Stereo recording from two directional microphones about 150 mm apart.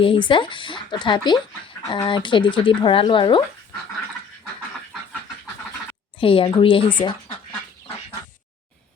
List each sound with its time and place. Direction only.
0.0 s speech: 35° left (ahead or behind)
6.1 s speech: 35° left (ahead or behind)